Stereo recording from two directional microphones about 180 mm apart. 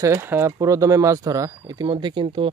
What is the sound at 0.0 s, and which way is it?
Speech, 15° right (ahead or behind).